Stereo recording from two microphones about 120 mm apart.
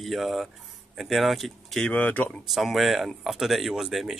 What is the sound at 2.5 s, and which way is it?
Speech, centre (ahead or behind).